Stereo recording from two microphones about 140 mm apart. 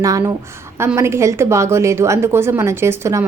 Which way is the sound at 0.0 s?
25° right (ahead or behind).